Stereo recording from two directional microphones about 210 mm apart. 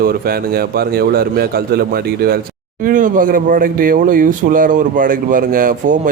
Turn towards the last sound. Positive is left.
turn(degrees=-40)  # may be behind; listen again after turning